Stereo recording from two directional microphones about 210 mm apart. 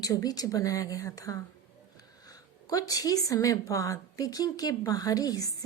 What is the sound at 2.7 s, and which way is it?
A woman's voice, 15° left (ahead or behind).